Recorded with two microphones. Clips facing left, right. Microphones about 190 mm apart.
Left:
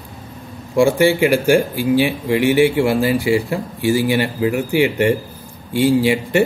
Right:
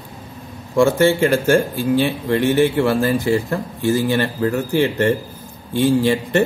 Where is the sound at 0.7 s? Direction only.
10° left (ahead or behind).